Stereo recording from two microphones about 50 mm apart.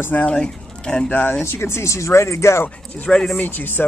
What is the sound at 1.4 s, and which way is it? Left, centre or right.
Speech, left.